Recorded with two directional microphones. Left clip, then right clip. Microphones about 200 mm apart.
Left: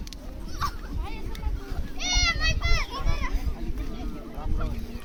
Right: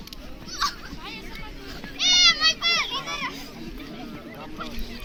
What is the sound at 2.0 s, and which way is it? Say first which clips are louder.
Children playing: right 8 dB; 60° left (ahead or behind).